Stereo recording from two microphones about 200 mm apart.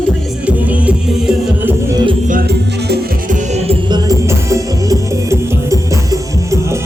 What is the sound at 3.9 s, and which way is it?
Music, 20° right (ahead or behind).